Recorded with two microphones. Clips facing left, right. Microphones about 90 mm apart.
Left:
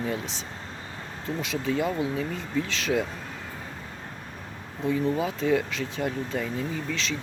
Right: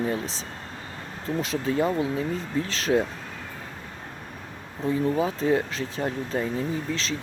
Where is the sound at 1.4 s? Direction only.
35° right (ahead or behind).